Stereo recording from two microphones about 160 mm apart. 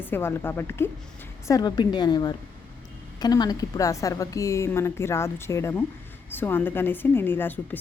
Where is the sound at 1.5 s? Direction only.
25° left (ahead or behind).